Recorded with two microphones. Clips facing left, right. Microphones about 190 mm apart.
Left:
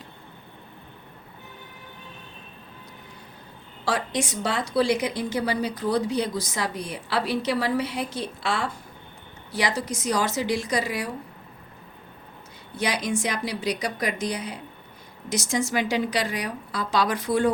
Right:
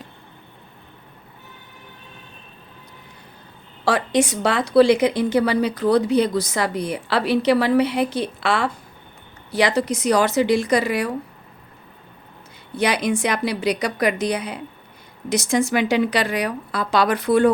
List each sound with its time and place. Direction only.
3.8 s a woman's voice: 65° right (ahead or behind)
12.7 s a woman's voice: 65° right (ahead or behind)